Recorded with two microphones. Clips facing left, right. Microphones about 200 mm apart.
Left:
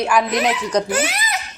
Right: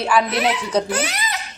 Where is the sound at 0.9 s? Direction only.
25° left (ahead or behind).